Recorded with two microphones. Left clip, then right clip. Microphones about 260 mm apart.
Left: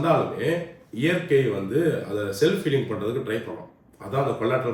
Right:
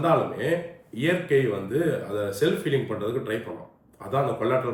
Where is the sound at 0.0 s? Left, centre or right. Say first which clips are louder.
Left 1 dB; centre.